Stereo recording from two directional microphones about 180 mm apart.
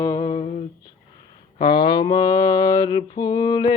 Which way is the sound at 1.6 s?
25° left (ahead or behind).